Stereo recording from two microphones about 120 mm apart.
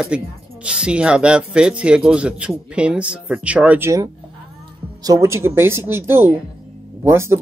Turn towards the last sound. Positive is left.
turn(degrees=-20)  # may be behind; listen again after turning